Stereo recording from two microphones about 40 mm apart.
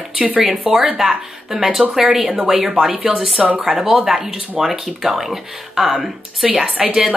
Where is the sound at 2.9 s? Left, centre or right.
Right.